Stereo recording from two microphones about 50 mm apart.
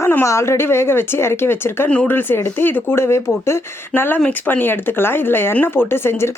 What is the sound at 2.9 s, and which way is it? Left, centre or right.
Speech, left.